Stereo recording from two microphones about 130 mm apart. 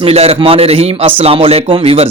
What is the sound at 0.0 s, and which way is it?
Speech, 50° right (ahead or behind).